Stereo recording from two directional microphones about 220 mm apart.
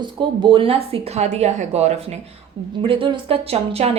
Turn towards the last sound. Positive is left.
turn(degrees=-25)  # may be behind; listen again after turning